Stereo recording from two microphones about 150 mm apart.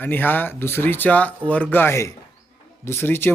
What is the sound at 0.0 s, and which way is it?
Speech, 10° left (ahead or behind).